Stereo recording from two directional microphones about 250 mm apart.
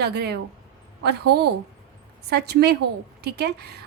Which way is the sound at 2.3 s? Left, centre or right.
Right.